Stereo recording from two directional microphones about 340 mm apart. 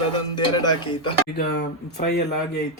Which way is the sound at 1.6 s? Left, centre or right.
Left.